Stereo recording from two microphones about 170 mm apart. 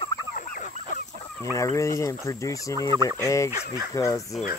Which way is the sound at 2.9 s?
20° right (ahead or behind).